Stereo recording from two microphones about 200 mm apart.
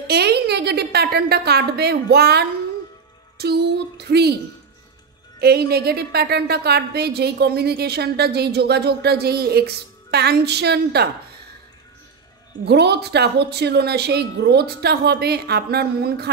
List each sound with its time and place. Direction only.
0.0 s a woman's voice: 55° right (ahead or behind)
5.4 s a woman's voice: 50° right (ahead or behind)
12.6 s speech: 55° right (ahead or behind)